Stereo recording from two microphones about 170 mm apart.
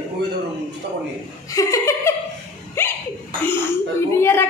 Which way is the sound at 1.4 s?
20° left (ahead or behind).